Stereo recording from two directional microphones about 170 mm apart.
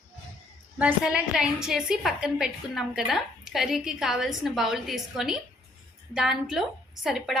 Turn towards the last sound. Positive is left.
turn(degrees=0)  # may be behind; listen again after turning